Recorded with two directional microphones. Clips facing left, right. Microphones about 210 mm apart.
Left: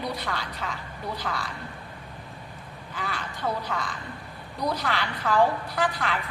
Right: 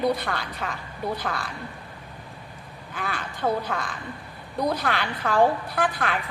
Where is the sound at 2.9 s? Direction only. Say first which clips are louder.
Right 2 dB; 55° right (ahead or behind).